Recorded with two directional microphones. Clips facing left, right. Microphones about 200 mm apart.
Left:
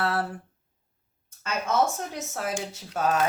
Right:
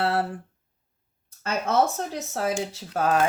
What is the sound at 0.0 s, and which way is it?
Speech, 25° right (ahead or behind).